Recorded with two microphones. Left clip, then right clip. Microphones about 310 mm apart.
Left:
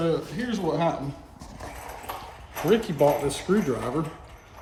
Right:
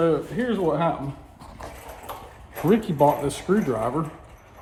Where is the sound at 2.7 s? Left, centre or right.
Centre.